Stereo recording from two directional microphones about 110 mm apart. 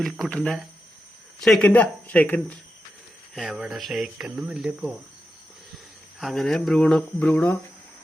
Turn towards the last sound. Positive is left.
turn(degrees=15)  # may be behind; listen again after turning